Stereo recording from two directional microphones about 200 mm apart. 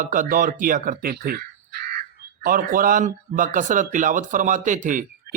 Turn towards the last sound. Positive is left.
turn(degrees=-40)  # may be behind; listen again after turning